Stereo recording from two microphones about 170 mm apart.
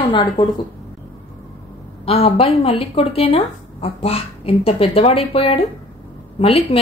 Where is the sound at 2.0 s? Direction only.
35° left (ahead or behind).